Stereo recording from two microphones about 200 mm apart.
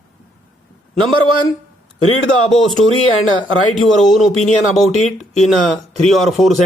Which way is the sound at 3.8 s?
Centre (ahead or behind).